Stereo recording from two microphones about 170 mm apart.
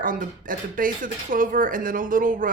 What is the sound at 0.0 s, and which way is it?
Speech, 55° right (ahead or behind).